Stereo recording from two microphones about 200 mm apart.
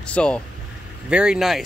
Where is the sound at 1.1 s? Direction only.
5° right (ahead or behind).